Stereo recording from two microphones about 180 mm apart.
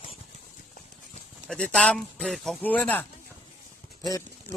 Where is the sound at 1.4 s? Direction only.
5° left (ahead or behind).